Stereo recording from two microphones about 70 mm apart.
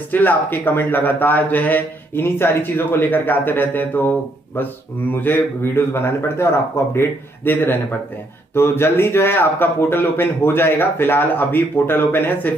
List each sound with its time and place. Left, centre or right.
0.1 s a man's voice: left